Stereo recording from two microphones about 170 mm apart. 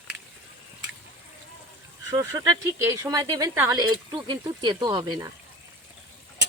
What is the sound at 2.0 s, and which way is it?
Speech, 20° right (ahead or behind).